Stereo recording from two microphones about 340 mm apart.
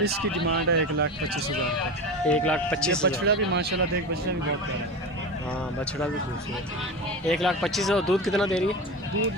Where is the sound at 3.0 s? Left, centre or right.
Right.